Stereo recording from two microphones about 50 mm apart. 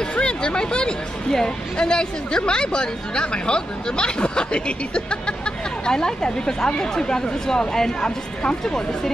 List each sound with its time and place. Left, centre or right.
0.0 s speech: centre